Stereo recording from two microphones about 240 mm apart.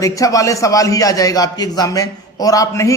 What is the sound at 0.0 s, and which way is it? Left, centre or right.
A man's voice, centre.